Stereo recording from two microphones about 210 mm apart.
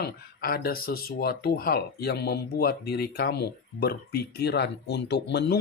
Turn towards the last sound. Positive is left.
turn(degrees=55)  # may be behind; listen again after turning